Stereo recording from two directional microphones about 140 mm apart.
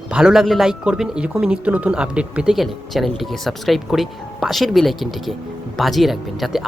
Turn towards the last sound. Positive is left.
turn(degrees=0)  # may be behind; listen again after turning